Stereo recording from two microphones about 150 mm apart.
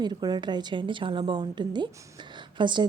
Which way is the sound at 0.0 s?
30° right (ahead or behind).